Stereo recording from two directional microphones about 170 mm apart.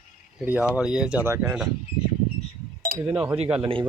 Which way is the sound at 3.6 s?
30° right (ahead or behind).